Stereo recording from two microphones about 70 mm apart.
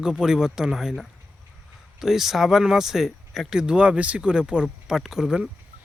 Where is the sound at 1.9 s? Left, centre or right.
Centre.